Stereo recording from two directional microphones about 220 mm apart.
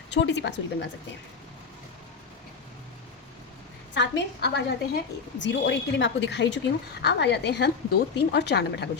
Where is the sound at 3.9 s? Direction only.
50° left (ahead or behind).